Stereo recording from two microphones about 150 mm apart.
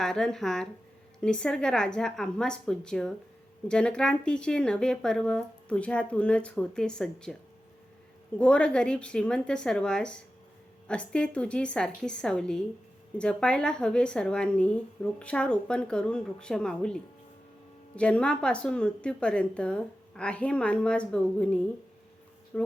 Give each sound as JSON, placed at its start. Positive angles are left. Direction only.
{"t": 0.0, "sound": "speech", "side_deg": 5}
{"t": 8.4, "sound": "speech", "side_deg": 5}